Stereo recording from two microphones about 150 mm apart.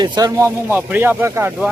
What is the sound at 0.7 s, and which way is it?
Speech, 15° right (ahead or behind).